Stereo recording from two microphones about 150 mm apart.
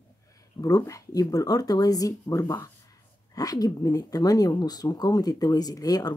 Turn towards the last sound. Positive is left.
turn(degrees=25)  # may be behind; listen again after turning